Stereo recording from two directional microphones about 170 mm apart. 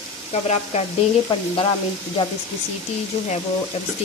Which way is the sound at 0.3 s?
40° left (ahead or behind).